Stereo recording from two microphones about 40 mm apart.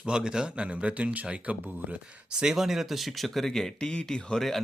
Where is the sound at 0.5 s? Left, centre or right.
Right.